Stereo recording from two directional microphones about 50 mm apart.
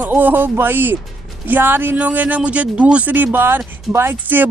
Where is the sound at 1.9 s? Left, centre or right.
Right.